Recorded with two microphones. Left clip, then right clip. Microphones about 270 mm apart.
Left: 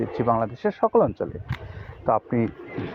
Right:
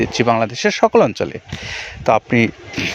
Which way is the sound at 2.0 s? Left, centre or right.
Right.